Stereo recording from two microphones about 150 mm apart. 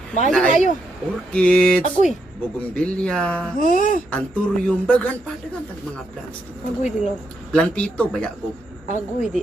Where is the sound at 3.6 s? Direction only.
65° left (ahead or behind).